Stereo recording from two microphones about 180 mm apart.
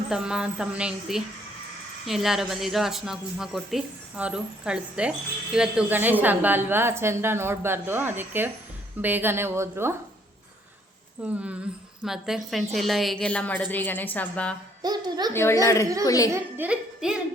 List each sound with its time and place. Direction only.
0.1 s a woman's voice: 5° right (ahead or behind)
11.2 s a woman's voice: 5° right (ahead or behind)
14.8 s a woman's voice: 20° right (ahead or behind)
15.3 s a child's voice: 15° left (ahead or behind)
16.3 s speech: 10° right (ahead or behind)